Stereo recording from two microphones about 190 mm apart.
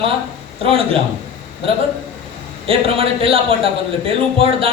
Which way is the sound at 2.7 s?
30° right (ahead or behind).